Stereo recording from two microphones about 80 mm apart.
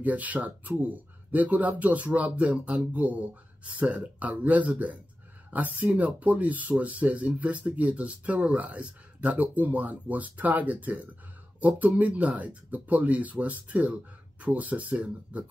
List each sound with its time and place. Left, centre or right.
0.0 s speech: centre